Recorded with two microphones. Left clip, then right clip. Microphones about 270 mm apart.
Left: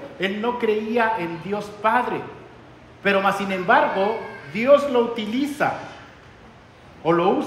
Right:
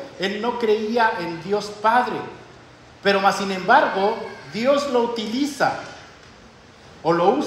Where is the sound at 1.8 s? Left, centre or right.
Centre.